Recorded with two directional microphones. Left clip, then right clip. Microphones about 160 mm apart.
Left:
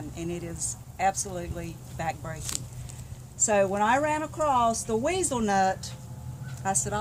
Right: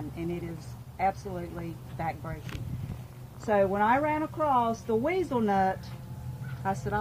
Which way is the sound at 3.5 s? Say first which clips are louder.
Left 1 dB; 45° left (ahead or behind).